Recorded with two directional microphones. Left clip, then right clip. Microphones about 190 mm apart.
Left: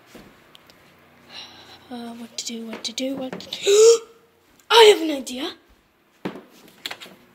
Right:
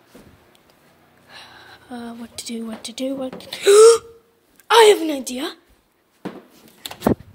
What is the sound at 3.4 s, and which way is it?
A woman's voice, 25° right (ahead or behind).